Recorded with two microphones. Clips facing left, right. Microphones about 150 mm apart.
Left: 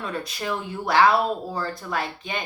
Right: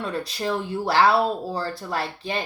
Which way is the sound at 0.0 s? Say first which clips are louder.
Right 3 dB; 30° right (ahead or behind).